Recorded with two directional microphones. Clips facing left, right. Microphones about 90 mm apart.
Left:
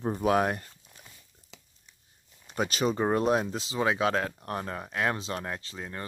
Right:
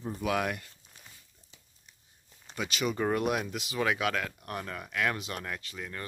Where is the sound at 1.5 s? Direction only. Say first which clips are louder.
Left 8 dB; 90° left.